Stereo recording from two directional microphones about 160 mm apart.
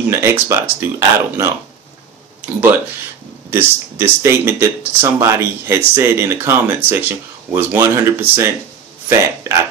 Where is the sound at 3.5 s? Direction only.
15° right (ahead or behind).